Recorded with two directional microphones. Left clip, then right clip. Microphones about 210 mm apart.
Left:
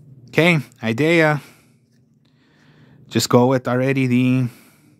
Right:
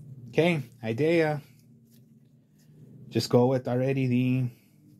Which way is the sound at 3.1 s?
45° left (ahead or behind).